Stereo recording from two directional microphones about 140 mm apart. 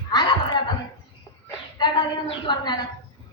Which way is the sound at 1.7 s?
30° left (ahead or behind).